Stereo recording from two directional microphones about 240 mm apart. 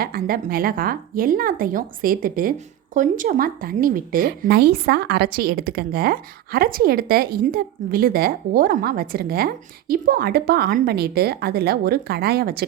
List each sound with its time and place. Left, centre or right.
0.0 s speech: right